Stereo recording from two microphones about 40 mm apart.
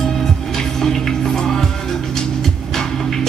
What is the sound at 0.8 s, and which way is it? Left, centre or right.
Music, centre.